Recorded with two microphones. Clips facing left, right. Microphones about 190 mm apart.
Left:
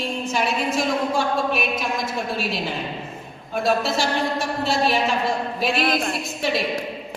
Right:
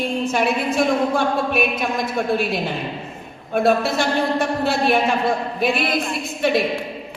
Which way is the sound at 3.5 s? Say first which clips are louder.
Right 4 dB; 55° right (ahead or behind).